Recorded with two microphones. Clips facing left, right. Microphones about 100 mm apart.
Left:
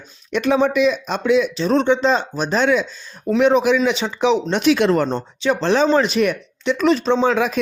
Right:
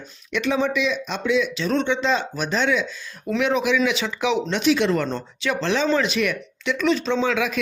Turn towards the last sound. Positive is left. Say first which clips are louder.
# left 5 dB
turn(degrees=35)  # may be behind; listen again after turning